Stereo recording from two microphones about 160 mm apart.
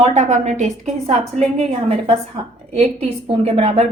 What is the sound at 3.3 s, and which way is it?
Speech, 40° right (ahead or behind).